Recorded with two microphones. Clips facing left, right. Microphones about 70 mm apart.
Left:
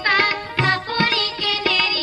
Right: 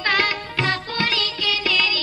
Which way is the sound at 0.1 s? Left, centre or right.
Left.